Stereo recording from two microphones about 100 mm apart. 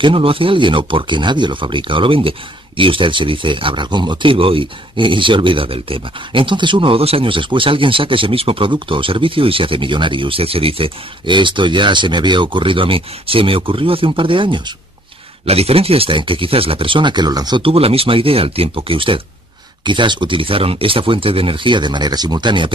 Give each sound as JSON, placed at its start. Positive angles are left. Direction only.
{"t": 0.0, "sound": "speech", "side_deg": -65}
{"t": 15.4, "sound": "speech", "side_deg": -90}
{"t": 17.6, "sound": "speech", "side_deg": -70}
{"t": 19.8, "sound": "speech", "side_deg": -50}